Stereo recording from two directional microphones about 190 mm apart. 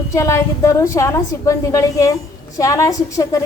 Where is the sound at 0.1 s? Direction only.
15° left (ahead or behind).